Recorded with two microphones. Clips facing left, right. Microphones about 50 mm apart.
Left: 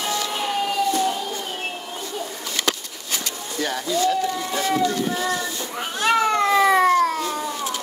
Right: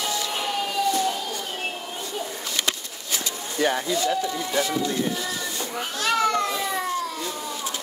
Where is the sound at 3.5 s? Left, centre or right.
Centre.